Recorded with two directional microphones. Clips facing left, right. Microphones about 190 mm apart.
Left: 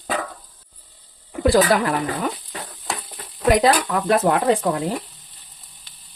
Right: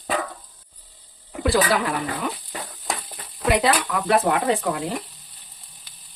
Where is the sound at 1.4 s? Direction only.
45° left (ahead or behind).